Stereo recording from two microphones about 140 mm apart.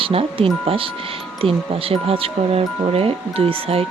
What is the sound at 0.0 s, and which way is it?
Speech, 40° right (ahead or behind).